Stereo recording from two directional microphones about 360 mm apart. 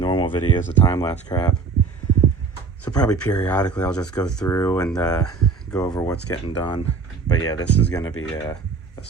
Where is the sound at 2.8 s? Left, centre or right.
Centre.